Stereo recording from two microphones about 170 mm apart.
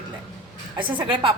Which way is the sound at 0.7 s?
10° right (ahead or behind).